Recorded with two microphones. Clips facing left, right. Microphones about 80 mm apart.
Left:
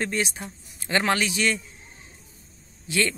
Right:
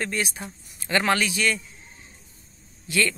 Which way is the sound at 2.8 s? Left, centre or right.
Left.